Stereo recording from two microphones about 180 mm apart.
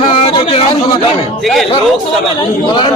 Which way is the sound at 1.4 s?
Centre (ahead or behind).